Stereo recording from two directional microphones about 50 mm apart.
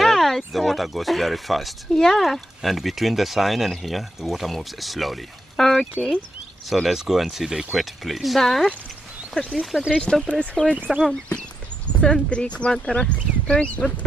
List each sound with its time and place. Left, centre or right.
0.0 s a sound: centre
0.5 s speech: centre
9.6 s speech: centre
10.9 s speech: centre
12.0 s speech: left